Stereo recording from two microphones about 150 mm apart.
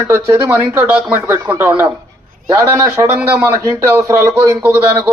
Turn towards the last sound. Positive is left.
turn(degrees=-10)  # may be behind; listen again after turning